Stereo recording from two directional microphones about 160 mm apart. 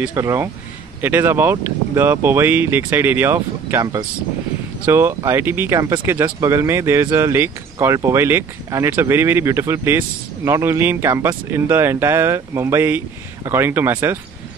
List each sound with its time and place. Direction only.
0.0 s speech: 15° right (ahead or behind)